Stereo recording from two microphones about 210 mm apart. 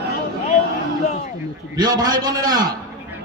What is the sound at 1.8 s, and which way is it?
Speech, 20° right (ahead or behind).